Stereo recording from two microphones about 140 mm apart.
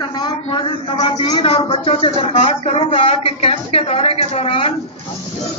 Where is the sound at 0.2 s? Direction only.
40° left (ahead or behind).